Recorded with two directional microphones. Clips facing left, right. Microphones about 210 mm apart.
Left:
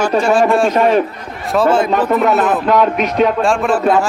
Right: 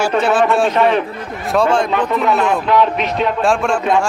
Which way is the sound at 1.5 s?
5° left (ahead or behind).